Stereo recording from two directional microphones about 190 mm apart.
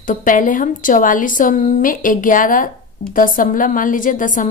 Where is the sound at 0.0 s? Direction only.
45° left (ahead or behind).